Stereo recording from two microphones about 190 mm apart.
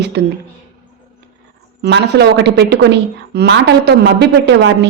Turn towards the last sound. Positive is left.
turn(degrees=-65)  # may be behind; listen again after turning